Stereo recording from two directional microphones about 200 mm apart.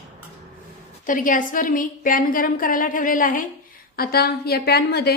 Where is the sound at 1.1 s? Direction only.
40° left (ahead or behind).